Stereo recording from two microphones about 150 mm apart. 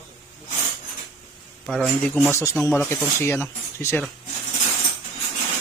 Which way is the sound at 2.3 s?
20° left (ahead or behind).